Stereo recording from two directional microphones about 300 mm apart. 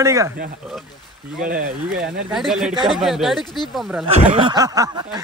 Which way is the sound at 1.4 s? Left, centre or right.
Right.